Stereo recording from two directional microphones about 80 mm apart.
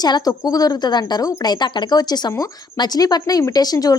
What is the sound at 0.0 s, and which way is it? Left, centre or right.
A woman's voice, left.